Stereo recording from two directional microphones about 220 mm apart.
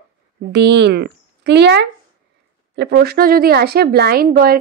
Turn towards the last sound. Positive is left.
turn(degrees=-40)  # may be behind; listen again after turning